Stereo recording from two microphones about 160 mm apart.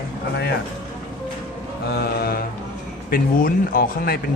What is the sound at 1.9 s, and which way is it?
Speech, 75° left (ahead or behind).